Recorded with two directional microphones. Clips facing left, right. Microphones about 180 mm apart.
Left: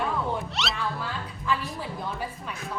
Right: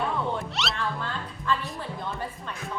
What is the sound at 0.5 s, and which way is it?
A woman's voice, centre (ahead or behind).